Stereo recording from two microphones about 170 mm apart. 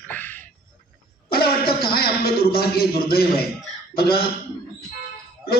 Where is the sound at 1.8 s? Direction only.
65° left (ahead or behind).